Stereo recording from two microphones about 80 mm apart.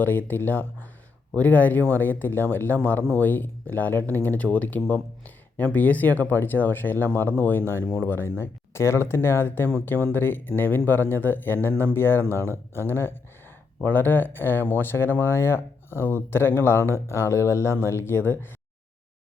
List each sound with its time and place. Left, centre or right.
0.0 s speech: left